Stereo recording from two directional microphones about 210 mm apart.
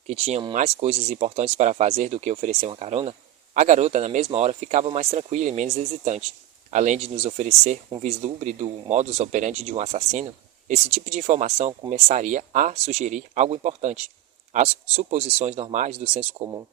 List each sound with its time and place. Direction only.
0.1 s speech: 30° right (ahead or behind)